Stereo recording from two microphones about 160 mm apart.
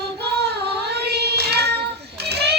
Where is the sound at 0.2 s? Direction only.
90° right.